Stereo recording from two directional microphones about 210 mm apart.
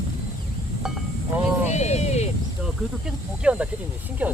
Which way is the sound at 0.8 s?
Centre (ahead or behind).